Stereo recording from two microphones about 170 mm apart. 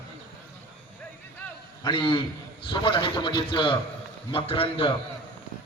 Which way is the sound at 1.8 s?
25° left (ahead or behind).